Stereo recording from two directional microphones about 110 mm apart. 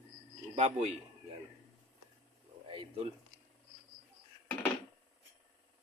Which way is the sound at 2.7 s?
55° right (ahead or behind).